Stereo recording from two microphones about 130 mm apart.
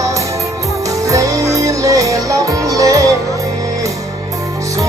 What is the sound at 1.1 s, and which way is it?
Music, 25° right (ahead or behind).